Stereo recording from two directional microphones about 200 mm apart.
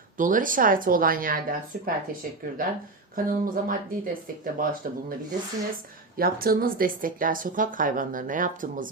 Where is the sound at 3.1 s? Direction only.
45° right (ahead or behind).